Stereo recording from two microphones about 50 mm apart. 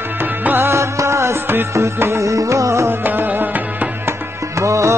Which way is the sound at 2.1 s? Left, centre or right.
Right.